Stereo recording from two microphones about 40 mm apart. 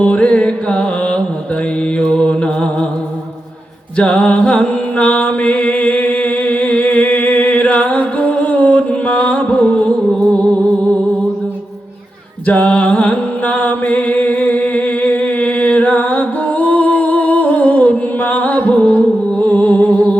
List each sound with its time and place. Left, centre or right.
0.0 s music: left
2.0 s mantra: left
3.9 s mantra: left
12.5 s music: left